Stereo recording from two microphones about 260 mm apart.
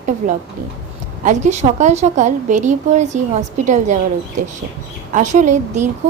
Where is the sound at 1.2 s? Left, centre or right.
Right.